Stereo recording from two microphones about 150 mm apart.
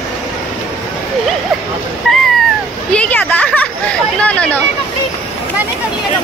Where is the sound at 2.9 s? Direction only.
10° left (ahead or behind).